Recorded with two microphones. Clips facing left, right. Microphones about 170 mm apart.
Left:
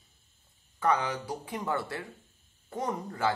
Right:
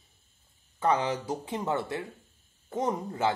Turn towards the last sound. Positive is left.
turn(degrees=-20)  # may be behind; listen again after turning